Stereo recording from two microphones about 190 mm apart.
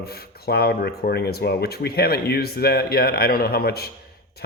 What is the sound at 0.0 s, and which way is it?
Speech, 55° left (ahead or behind).